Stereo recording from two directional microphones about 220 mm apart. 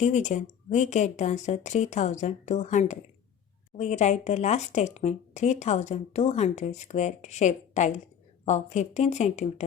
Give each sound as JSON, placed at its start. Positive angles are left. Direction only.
{"t": 0.0, "sound": "speech", "side_deg": 30}